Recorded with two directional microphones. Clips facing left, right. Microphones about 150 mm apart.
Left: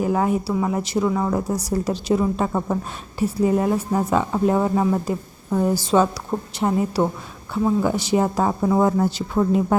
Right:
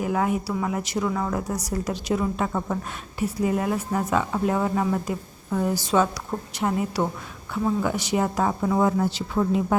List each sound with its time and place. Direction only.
0.0 s a woman's voice: 35° left (ahead or behind)